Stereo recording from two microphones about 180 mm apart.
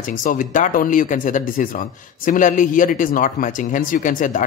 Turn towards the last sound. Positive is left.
turn(degrees=45)  # may be behind; listen again after turning